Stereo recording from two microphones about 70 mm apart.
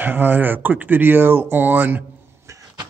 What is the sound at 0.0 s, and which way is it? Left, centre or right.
Speech, right.